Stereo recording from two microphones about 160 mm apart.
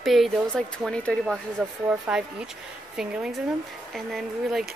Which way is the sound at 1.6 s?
10° right (ahead or behind).